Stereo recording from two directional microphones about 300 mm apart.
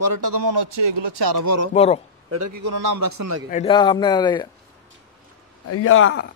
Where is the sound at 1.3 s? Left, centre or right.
Right.